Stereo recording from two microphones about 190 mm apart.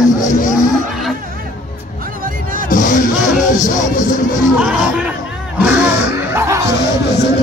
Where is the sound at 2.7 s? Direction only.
45° left (ahead or behind).